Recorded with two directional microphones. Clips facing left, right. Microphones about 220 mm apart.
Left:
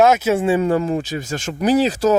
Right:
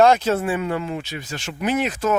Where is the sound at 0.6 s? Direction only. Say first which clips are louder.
Left 7 dB; 40° left (ahead or behind).